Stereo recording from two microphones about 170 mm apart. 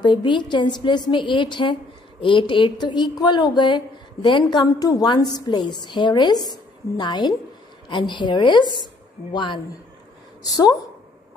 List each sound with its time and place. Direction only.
0.0 s a woman's voice: 25° left (ahead or behind)